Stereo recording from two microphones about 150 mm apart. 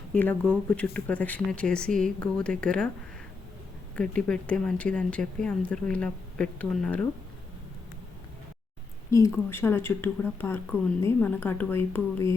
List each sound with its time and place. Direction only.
0.1 s speech: 10° left (ahead or behind)
3.9 s speech: 5° left (ahead or behind)
9.0 s speech: 20° left (ahead or behind)